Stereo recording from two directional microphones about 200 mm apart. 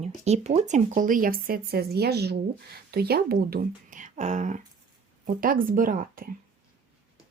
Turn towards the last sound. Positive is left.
turn(degrees=-45)  # may be behind; listen again after turning